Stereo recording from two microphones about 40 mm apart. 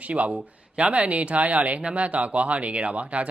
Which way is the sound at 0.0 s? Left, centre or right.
Right.